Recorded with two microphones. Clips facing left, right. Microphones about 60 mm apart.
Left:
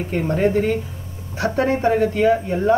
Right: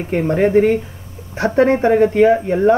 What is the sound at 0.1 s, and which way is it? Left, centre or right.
Speech, right.